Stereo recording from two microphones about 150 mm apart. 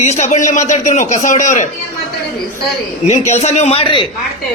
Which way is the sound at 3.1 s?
50° left (ahead or behind).